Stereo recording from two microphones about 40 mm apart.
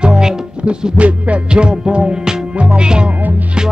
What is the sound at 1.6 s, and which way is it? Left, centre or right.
Music, right.